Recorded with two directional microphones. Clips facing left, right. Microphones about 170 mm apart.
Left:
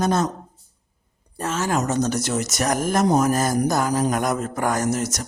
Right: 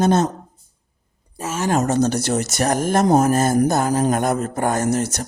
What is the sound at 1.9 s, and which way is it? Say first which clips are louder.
Speech: right 4 dB; 30° right (ahead or behind).